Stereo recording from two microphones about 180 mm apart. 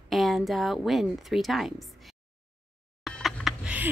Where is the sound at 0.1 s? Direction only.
Centre (ahead or behind).